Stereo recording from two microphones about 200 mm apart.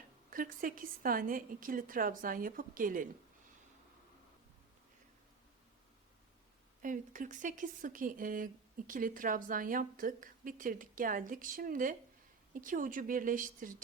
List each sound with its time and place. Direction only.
0.3 s a woman's voice: 45° right (ahead or behind)
6.8 s a woman's voice: 40° right (ahead or behind)